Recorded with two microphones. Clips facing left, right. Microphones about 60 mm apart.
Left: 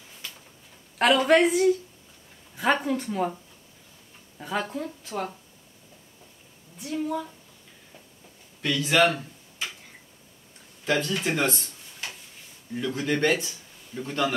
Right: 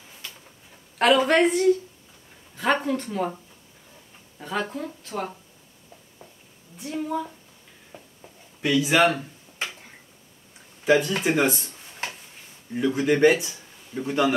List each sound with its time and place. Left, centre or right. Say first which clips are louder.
0.9 s speech: right 1 dB; centre
4.4 s speech: right 1 dB; centre
6.9 s speech: right 1 dB; centre
7.9 s a sound: right 7 dB; right
8.5 s speech: right 2 dB; centre
10.9 s speech: right 5 dB; centre
12.7 s speech: right 5 dB; centre